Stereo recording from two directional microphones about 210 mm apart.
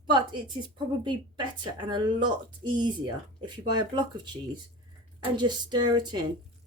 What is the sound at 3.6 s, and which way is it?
Speech, 20° right (ahead or behind).